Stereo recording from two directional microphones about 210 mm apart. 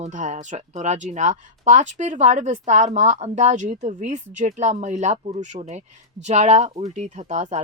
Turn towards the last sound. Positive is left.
turn(degrees=-35)  # may be behind; listen again after turning